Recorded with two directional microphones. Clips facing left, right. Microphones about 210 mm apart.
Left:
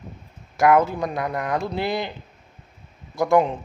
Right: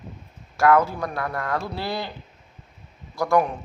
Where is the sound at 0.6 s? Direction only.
20° left (ahead or behind).